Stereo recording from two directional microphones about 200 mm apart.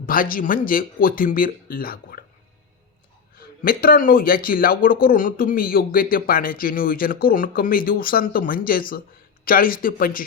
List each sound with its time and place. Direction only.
0.0 s a man's voice: 45° left (ahead or behind)
3.3 s a man's voice: 45° left (ahead or behind)